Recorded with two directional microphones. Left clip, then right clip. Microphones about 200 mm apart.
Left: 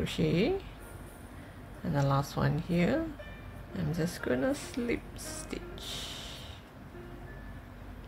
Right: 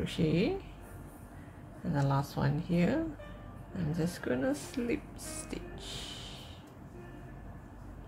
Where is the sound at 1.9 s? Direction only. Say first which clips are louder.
Left 2 dB; 10° left (ahead or behind).